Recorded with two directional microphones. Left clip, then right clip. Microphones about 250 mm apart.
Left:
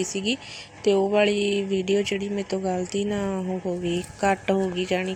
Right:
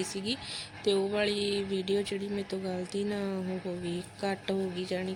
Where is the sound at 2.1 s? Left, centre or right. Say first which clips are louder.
Left 7 dB; left.